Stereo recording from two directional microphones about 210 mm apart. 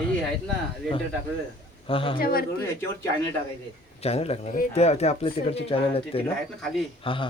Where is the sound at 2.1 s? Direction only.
45° left (ahead or behind).